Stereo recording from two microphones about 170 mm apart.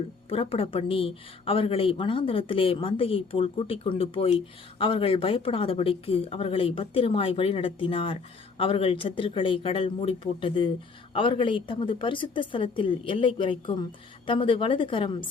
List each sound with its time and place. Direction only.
0.3 s a woman's voice: 30° left (ahead or behind)